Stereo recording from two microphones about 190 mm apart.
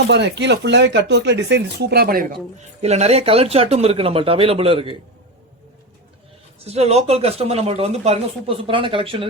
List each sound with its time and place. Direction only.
0.1 s speech: 65° right (ahead or behind)
2.8 s speech: 35° right (ahead or behind)
6.7 s speech: 35° right (ahead or behind)